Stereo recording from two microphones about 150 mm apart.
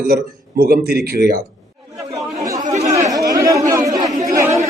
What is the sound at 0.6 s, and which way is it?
Speech, 90° right.